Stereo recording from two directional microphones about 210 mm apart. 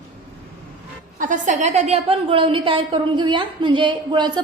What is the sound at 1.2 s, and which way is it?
A woman's voice, 35° right (ahead or behind).